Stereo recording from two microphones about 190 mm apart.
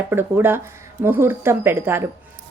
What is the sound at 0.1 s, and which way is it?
A woman's voice, 10° right (ahead or behind).